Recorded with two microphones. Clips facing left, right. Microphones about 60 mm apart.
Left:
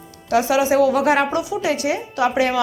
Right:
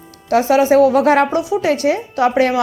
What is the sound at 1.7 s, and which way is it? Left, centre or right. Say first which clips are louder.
Speech: right 5 dB; right.